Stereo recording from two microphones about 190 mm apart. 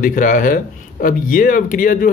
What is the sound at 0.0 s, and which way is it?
Speech, 45° left (ahead or behind).